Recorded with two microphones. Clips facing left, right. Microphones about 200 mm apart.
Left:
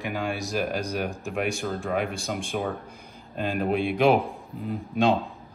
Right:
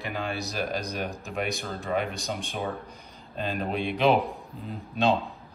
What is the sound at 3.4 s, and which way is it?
A man's voice, 10° left (ahead or behind).